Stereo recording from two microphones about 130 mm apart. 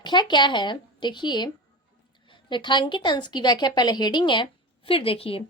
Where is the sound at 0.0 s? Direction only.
35° left (ahead or behind).